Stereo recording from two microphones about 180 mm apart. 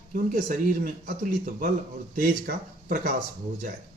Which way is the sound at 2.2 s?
50° right (ahead or behind).